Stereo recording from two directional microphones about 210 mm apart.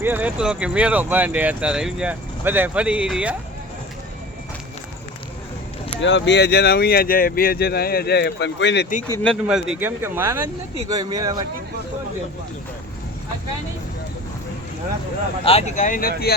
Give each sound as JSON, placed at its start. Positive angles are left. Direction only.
{"t": 0.0, "sound": "speech", "side_deg": -10}
{"t": 6.0, "sound": "speech", "side_deg": 60}
{"t": 9.2, "sound": "speech", "side_deg": 0}
{"t": 15.4, "sound": "speech", "side_deg": 30}